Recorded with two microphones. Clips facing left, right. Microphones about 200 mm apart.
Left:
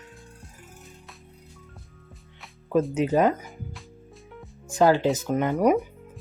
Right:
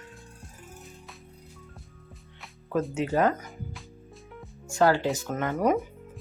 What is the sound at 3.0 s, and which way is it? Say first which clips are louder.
Speech: left 2 dB; 20° left (ahead or behind).